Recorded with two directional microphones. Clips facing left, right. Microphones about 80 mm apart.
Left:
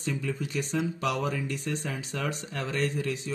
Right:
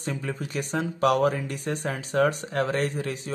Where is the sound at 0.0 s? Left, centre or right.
Right.